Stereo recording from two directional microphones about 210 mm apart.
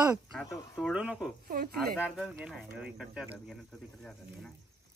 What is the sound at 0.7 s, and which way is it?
Speech, centre (ahead or behind).